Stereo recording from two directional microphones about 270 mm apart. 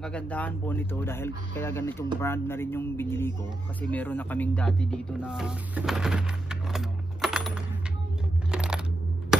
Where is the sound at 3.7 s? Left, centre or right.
Centre.